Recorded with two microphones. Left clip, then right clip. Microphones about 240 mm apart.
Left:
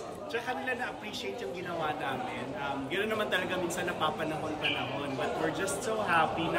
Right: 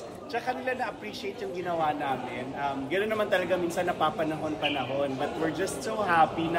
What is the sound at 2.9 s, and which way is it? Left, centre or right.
Speech, centre.